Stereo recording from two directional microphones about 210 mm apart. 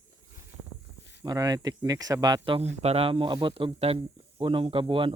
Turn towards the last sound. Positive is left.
turn(degrees=-25)  # may be behind; listen again after turning